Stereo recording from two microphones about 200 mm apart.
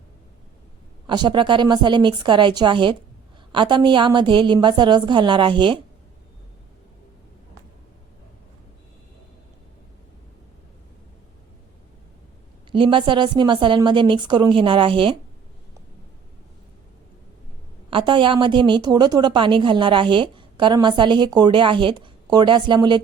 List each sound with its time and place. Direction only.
1.0 s a woman's voice: 20° right (ahead or behind)
12.7 s a woman's voice: 25° right (ahead or behind)
17.9 s a woman's voice: 25° right (ahead or behind)